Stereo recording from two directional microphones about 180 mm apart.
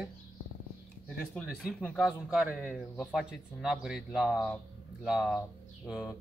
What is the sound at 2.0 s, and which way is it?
Speech, 5° right (ahead or behind).